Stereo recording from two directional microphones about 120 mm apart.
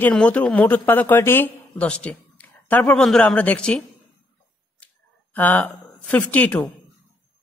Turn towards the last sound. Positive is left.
turn(degrees=10)  # may be behind; listen again after turning